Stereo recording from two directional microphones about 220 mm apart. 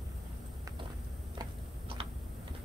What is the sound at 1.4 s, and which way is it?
Tick-tock, 25° right (ahead or behind).